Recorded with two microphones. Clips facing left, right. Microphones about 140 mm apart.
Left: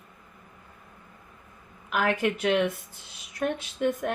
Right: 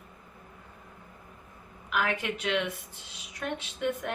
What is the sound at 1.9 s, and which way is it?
A woman's voice, 40° left (ahead or behind).